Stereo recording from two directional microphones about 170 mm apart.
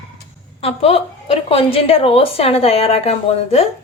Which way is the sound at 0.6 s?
35° left (ahead or behind).